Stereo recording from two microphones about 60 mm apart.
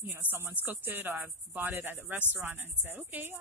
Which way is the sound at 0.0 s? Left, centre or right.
Right.